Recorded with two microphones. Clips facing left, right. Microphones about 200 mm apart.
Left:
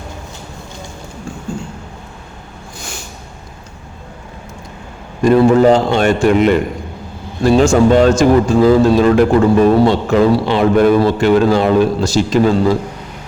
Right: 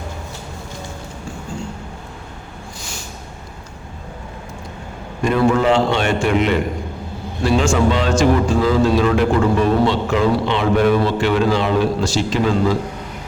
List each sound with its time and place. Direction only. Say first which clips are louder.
5.2 s a man's voice: left 7 dB; 40° left (ahead or behind)